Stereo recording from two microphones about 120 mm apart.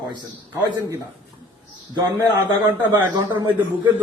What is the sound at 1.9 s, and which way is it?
A man's voice, 35° right (ahead or behind).